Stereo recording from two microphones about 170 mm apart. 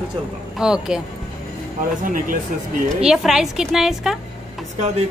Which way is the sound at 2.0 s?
50° right (ahead or behind).